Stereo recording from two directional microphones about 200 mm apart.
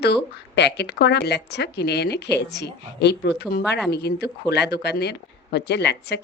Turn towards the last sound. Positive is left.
turn(degrees=55)  # may be behind; listen again after turning